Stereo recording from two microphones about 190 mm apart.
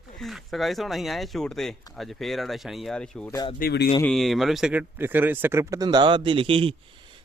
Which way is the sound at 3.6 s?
55° left (ahead or behind).